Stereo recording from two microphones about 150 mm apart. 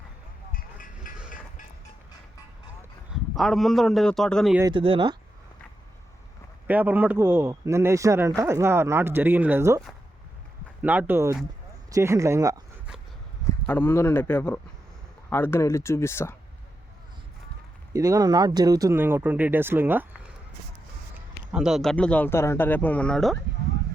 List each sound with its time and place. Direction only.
0.5 s music: 65° left (ahead or behind)
3.3 s a man's voice: centre (ahead or behind)
4.6 s speech: 35° right (ahead or behind)
6.7 s speech: 10° right (ahead or behind)
10.8 s speech: 10° right (ahead or behind)
13.7 s speech: 15° left (ahead or behind)
17.9 s speech: 25° right (ahead or behind)
21.5 s speech: 5° right (ahead or behind)